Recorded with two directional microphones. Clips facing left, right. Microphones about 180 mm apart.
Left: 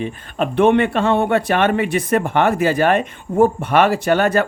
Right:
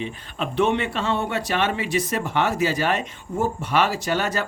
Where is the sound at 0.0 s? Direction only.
55° left (ahead or behind).